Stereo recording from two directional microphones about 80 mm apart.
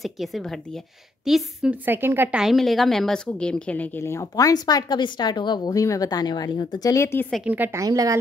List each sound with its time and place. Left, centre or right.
0.0 s speech: centre
1.7 s a woman's voice: right
2.3 s a woman's voice: centre
4.0 s speech: left
5.7 s speech: left
6.9 s speech: left
7.4 s a woman's voice: right
7.7 s a woman's voice: right